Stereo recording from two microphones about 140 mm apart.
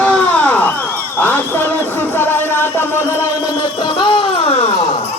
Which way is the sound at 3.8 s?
35° left (ahead or behind).